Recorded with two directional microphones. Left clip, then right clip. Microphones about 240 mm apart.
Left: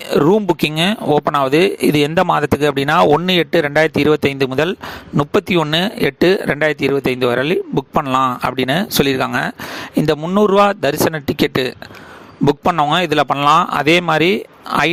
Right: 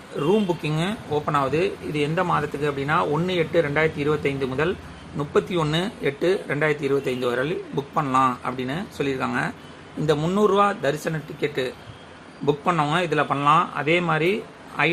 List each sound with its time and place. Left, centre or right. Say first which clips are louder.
0.2 s speech: left 8 dB; left